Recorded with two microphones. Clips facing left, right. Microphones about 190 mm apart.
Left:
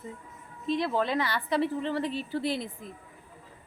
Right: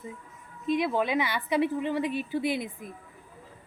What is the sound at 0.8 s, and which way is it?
Speech, 15° right (ahead or behind).